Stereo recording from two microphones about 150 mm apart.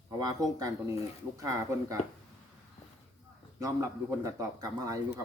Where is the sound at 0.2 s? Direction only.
25° right (ahead or behind).